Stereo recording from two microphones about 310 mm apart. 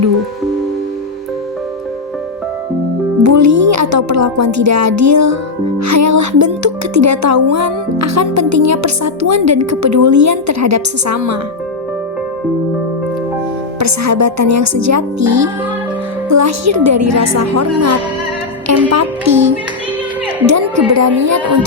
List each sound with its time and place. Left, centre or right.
3.2 s a woman's voice: right
13.7 s a woman's voice: right
18.9 s music: right
20.5 s a sound: right